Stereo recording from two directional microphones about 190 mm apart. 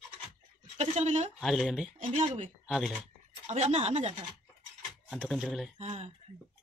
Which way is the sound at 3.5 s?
35° right (ahead or behind).